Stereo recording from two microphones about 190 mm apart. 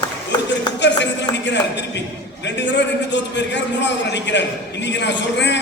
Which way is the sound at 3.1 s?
70° left (ahead or behind).